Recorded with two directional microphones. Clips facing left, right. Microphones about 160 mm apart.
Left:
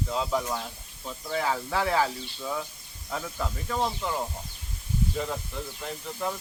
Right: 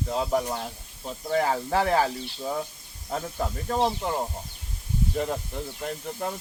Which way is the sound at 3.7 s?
30° right (ahead or behind).